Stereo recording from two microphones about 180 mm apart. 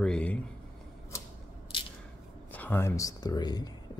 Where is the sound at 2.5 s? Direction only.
10° left (ahead or behind).